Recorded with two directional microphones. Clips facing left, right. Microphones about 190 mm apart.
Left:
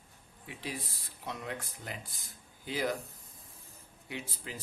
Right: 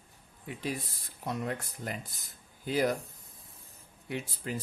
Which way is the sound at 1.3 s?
45° right (ahead or behind).